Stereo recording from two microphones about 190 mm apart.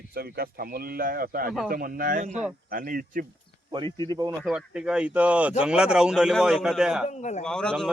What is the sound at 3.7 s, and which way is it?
Speech, 25° right (ahead or behind).